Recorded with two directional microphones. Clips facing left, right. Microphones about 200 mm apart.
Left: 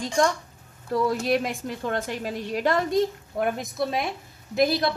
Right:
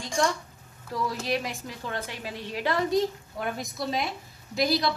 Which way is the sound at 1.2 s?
50° left (ahead or behind).